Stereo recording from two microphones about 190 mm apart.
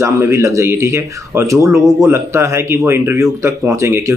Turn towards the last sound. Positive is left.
turn(degrees=-15)  # may be behind; listen again after turning